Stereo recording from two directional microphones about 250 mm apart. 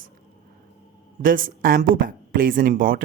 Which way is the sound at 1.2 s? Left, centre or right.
Right.